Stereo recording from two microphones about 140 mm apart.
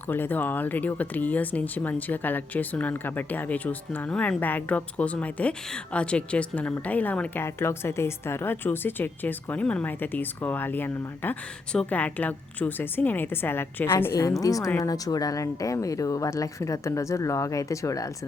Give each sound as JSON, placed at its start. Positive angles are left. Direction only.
{"t": 0.1, "sound": "speech", "side_deg": 15}